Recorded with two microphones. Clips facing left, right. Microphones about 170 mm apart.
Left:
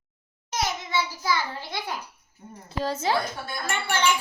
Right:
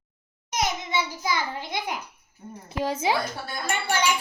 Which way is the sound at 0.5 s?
20° right (ahead or behind).